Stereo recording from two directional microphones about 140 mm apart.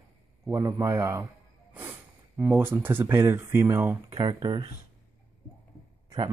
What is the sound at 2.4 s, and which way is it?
Speech, 15° right (ahead or behind).